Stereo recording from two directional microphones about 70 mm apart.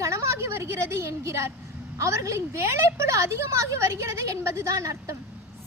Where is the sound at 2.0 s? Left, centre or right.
Right.